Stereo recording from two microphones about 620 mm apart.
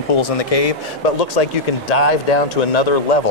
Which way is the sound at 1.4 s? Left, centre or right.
Left.